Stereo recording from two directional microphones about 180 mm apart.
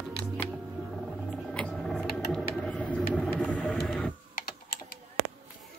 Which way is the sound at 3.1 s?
5° left (ahead or behind).